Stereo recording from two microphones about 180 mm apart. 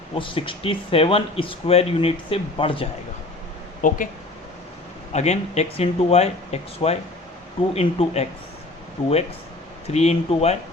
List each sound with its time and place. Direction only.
0.2 s speech: 30° left (ahead or behind)
3.8 s speech: 50° left (ahead or behind)
5.1 s speech: 40° left (ahead or behind)